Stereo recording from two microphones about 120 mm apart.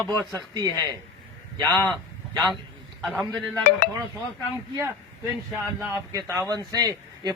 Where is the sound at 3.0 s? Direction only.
Centre (ahead or behind).